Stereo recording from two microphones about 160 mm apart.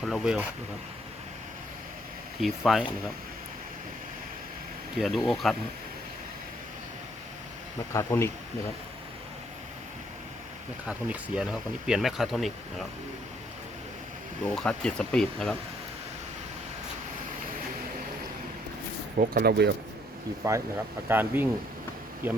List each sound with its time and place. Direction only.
0.0 s speech: 5° right (ahead or behind)
2.4 s speech: centre (ahead or behind)
4.9 s speech: centre (ahead or behind)
7.9 s speech: 15° left (ahead or behind)
10.8 s speech: 5° right (ahead or behind)
14.4 s speech: 5° left (ahead or behind)
19.2 s speech: 70° right (ahead or behind); by 19.7 s 85° right
20.4 s speech: 20° right (ahead or behind)